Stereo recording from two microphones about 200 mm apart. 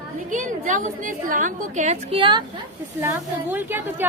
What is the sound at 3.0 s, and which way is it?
A woman's voice, 10° right (ahead or behind).